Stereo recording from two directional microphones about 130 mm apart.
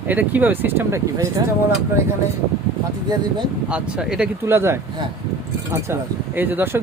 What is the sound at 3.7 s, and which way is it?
Speech, 5° right (ahead or behind).